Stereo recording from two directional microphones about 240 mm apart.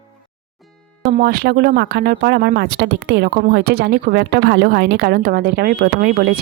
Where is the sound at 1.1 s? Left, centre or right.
Right.